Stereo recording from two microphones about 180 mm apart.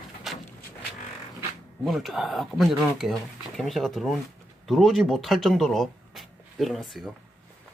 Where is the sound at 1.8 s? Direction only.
Centre (ahead or behind).